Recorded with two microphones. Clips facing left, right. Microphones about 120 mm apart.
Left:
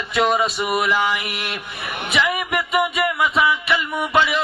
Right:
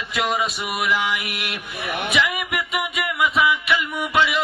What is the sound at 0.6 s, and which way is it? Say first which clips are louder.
Mantra: left 3 dB; 30° left (ahead or behind).